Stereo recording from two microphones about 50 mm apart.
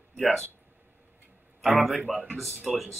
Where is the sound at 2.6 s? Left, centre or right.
Centre.